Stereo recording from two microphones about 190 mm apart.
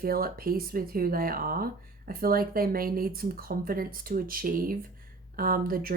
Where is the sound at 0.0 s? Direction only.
50° right (ahead or behind).